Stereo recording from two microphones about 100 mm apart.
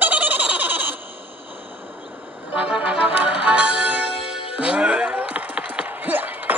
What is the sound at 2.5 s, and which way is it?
Music, 10° right (ahead or behind).